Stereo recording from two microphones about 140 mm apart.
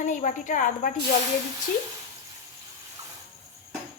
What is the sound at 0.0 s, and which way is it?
Speech, 65° left (ahead or behind).